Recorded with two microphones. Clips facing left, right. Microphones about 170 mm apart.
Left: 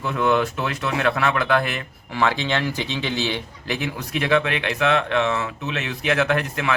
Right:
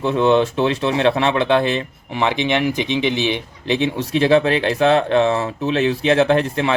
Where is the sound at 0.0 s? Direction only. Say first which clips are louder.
Right 5 dB; 25° right (ahead or behind).